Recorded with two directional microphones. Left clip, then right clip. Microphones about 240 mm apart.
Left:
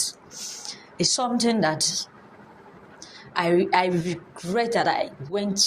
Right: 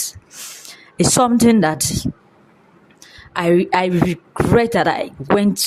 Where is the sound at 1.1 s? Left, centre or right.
Right.